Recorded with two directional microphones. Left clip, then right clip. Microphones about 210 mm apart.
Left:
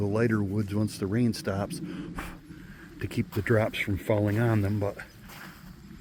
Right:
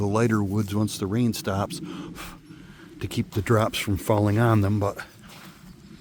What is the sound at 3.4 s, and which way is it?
Speech, 25° right (ahead or behind).